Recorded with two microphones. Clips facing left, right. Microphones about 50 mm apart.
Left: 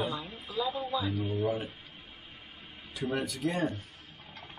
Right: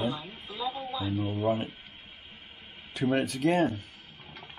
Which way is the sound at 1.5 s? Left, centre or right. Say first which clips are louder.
Right 4 dB; right.